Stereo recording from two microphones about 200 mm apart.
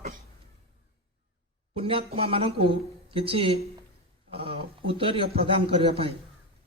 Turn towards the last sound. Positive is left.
turn(degrees=-30)  # may be behind; listen again after turning